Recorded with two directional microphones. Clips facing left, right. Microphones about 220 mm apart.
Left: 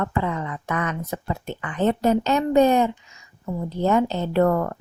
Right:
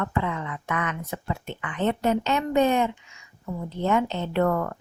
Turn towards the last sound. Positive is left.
turn(degrees=40)  # may be behind; listen again after turning